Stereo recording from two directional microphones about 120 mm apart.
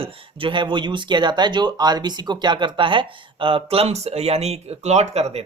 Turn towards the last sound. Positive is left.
turn(degrees=-60)  # may be behind; listen again after turning